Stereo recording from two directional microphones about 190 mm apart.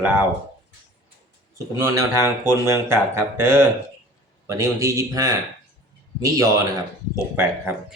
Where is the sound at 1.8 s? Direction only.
15° right (ahead or behind).